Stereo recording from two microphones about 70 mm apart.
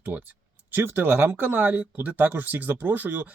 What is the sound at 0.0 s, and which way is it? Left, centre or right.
Speech, right.